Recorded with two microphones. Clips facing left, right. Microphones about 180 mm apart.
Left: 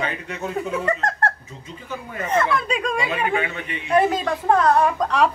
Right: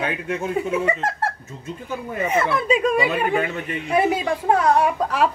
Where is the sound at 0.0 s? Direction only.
5° right (ahead or behind).